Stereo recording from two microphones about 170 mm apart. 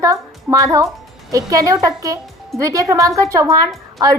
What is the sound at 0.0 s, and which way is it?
A woman's voice, 20° right (ahead or behind).